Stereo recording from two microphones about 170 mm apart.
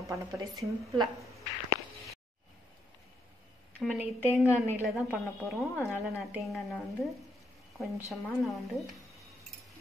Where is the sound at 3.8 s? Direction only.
Centre (ahead or behind).